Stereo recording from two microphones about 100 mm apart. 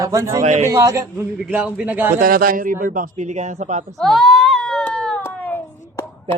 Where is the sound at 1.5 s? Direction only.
15° right (ahead or behind).